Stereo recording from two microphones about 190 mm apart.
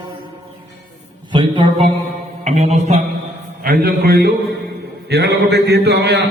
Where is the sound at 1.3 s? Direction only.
25° right (ahead or behind).